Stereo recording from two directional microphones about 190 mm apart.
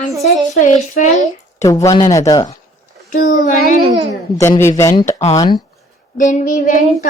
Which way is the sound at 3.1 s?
45° left (ahead or behind).